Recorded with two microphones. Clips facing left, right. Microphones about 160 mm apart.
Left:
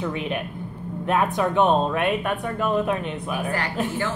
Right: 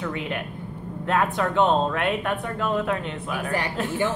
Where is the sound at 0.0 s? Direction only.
20° left (ahead or behind).